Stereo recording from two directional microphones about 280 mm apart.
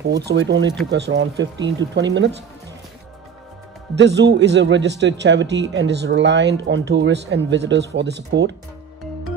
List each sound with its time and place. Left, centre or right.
0.0 s a man's voice: right
3.9 s a man's voice: right